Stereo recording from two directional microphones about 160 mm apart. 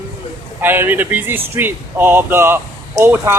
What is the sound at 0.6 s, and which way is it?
Speech, 10° right (ahead or behind).